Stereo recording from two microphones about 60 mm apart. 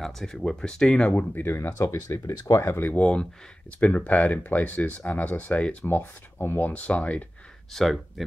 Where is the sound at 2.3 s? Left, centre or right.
Left.